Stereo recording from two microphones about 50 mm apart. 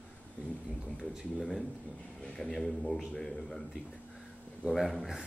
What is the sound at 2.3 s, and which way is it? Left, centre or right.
Speech, centre.